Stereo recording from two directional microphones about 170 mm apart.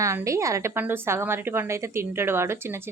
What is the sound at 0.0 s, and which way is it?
A woman's voice, 15° right (ahead or behind).